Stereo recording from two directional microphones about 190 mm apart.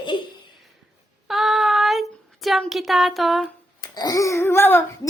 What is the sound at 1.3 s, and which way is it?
A woman's voice, centre (ahead or behind).